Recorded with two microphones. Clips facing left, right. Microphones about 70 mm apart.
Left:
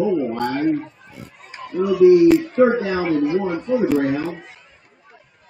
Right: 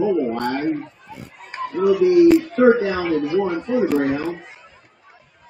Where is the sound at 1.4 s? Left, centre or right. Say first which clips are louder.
Right 3 dB; right.